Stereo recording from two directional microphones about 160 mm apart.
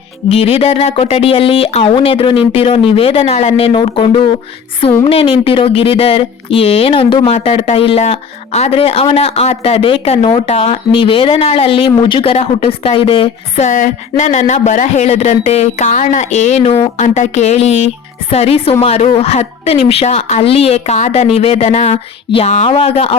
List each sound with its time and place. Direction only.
0.3 s speech: 40° left (ahead or behind)